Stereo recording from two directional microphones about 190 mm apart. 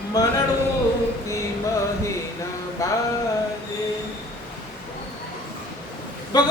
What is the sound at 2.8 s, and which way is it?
Music, 15° left (ahead or behind).